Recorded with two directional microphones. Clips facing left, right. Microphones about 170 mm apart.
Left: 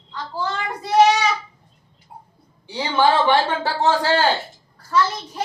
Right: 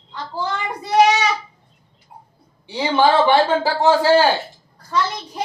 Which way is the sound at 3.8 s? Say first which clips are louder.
Right 5 dB; 5° right (ahead or behind).